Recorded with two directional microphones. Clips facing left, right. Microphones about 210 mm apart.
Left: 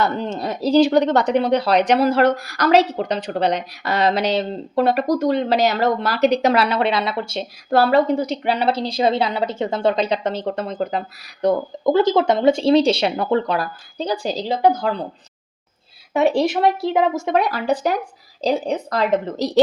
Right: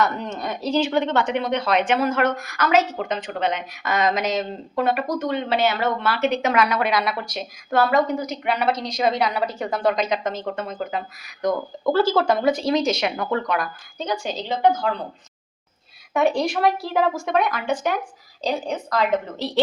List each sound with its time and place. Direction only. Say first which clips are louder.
0.0 s a woman's voice: left 2 dB; 30° left (ahead or behind)
11.9 s a woman's voice: left 3 dB; 20° left (ahead or behind); by 15.0 s 35° left (ahead or behind)
16.1 s a woman's voice: left 3 dB; 25° left (ahead or behind); by 19.6 s 40° left (ahead or behind)